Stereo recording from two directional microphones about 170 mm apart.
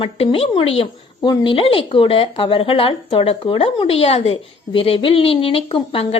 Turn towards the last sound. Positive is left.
turn(degrees=35)  # may be behind; listen again after turning